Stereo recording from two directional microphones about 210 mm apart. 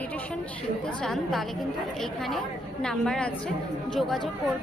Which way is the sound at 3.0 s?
5° left (ahead or behind).